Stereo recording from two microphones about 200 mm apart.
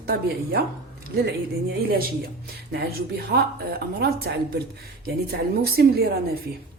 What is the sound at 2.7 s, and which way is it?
Speech, 50° right (ahead or behind).